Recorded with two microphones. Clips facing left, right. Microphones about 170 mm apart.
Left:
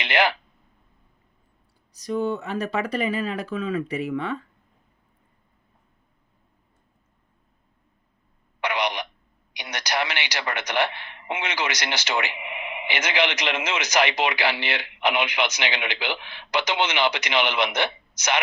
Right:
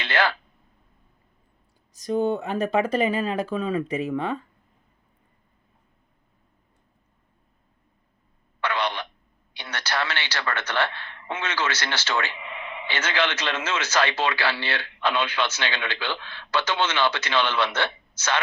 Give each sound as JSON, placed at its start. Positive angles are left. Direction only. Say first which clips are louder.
{"t": 0.0, "sound": "a man's voice", "louder": "left 2 dB", "side_deg": 15}
{"t": 1.9, "sound": "speech", "louder": "right 2 dB", "side_deg": -50}
{"t": 3.0, "sound": "speech", "louder": "right 2 dB", "side_deg": -30}
{"t": 8.6, "sound": "telephone", "louder": "left 1 dB", "side_deg": 15}
{"t": 9.5, "sound": "a man's voice", "louder": "left 1 dB", "side_deg": 15}